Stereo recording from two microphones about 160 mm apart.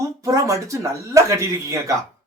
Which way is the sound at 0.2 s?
20° right (ahead or behind).